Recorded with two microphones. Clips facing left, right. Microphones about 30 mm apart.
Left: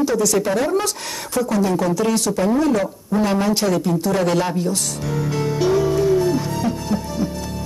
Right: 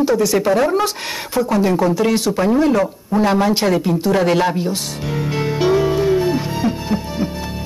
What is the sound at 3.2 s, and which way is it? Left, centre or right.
Music, right.